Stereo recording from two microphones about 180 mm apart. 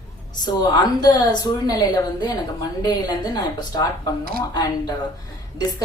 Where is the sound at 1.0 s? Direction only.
25° left (ahead or behind).